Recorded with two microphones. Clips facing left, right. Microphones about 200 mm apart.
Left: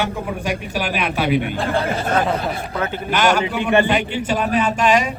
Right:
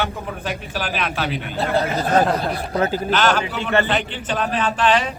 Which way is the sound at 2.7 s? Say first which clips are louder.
Right 6 dB; 35° right (ahead or behind).